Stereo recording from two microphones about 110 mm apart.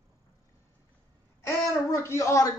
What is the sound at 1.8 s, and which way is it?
Speech, 25° left (ahead or behind).